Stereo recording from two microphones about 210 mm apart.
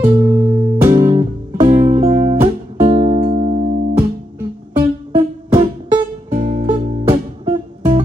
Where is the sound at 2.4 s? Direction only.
30° right (ahead or behind).